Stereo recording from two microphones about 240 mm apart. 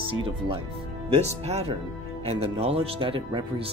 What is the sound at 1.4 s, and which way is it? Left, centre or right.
Speech, right.